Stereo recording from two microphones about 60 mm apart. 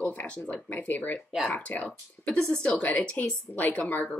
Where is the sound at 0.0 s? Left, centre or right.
Left.